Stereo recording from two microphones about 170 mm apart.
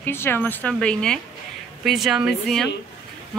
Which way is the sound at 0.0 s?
15° left (ahead or behind).